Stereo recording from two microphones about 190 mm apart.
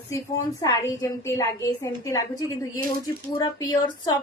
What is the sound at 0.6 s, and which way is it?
A woman's voice, 20° left (ahead or behind).